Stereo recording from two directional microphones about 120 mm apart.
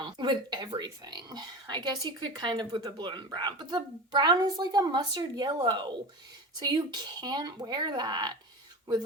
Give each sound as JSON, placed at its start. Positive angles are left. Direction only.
{"t": 0.0, "sound": "speech", "side_deg": -40}